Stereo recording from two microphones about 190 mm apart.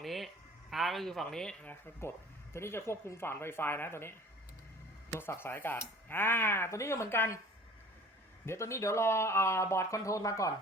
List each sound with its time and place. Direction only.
0.0 s a sound: centre (ahead or behind)
0.7 s speech: centre (ahead or behind)
2.0 s speech: 15° left (ahead or behind)
5.1 s speech: 10° left (ahead or behind)
8.4 s speech: 15° left (ahead or behind)